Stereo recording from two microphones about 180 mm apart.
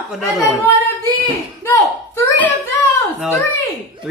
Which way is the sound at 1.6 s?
15° left (ahead or behind).